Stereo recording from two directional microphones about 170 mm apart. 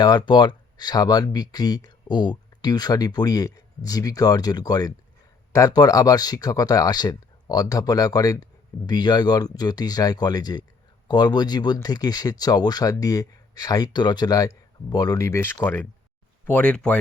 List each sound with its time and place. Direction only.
0.0 s speech: 25° left (ahead or behind); by 17.0 s 5° left (ahead or behind)